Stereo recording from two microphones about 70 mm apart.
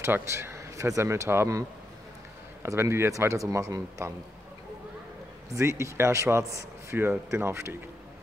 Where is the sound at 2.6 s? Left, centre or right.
Right.